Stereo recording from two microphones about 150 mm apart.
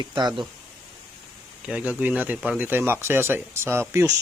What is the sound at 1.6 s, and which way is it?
Speech, 10° right (ahead or behind).